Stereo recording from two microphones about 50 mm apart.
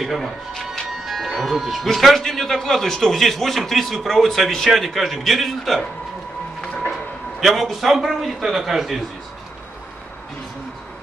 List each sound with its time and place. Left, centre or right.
0.0 s a man's voice: centre
6.6 s a sound: left
6.9 s a man's voice: centre